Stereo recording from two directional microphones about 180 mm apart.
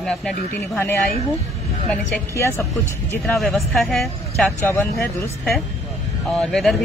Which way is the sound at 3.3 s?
Centre (ahead or behind).